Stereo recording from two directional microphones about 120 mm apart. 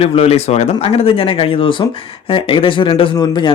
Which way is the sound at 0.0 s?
55° left (ahead or behind).